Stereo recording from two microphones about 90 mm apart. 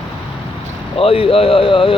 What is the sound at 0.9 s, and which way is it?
Speech, 90° left.